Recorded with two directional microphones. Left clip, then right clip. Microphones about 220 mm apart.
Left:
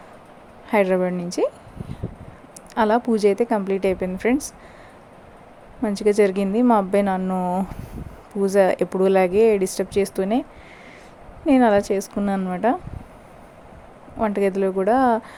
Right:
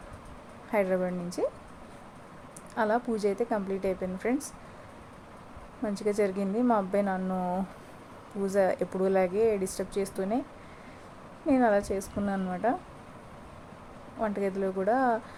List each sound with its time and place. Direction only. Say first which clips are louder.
0.7 s speech: left 9 dB; 35° left (ahead or behind)
2.7 s speech: left 9 dB; 30° left (ahead or behind)
5.8 s speech: left 10 dB; 30° left (ahead or behind)
11.4 s speech: left 8 dB; 30° left (ahead or behind)
14.2 s speech: left 9 dB; 35° left (ahead or behind)